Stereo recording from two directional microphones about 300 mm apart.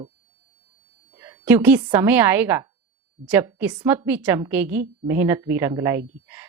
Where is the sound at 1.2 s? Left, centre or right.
Centre.